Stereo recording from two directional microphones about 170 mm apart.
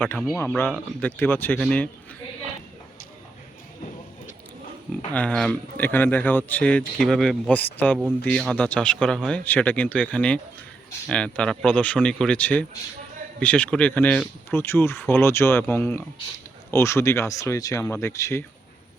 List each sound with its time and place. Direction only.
0.3 s speech: 10° left (ahead or behind)
5.1 s speech: 5° left (ahead or behind)